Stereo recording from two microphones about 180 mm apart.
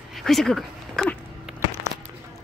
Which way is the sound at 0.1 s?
Centre (ahead or behind).